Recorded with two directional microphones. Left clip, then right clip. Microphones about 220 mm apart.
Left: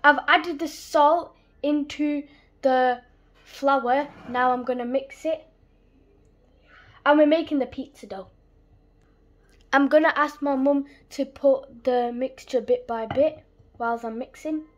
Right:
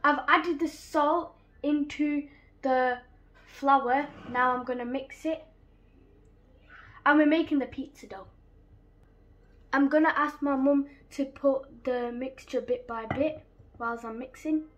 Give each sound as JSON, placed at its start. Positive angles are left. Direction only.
{"t": 0.0, "sound": "a woman's voice", "side_deg": 50}
{"t": 7.0, "sound": "a woman's voice", "side_deg": 40}
{"t": 9.7, "sound": "a woman's voice", "side_deg": 50}